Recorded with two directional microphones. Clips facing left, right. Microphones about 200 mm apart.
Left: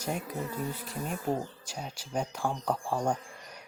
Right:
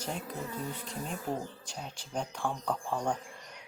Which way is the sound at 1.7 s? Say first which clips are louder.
Left 3 dB; 10° left (ahead or behind).